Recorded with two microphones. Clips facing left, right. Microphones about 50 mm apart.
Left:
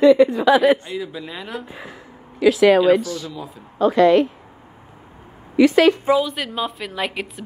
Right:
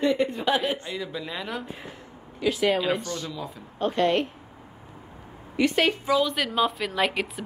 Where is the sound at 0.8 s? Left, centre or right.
Centre.